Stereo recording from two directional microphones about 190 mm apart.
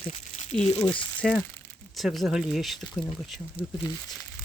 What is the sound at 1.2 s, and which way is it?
Speech, centre (ahead or behind).